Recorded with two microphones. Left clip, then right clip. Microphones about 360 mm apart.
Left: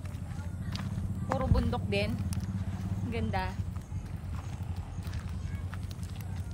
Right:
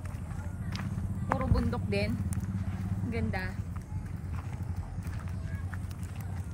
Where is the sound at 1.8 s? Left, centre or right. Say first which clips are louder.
Left 1 dB; left.